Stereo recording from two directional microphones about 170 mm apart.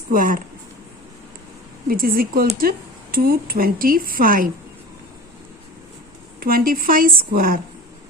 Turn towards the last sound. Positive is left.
turn(degrees=-60)  # may be behind; listen again after turning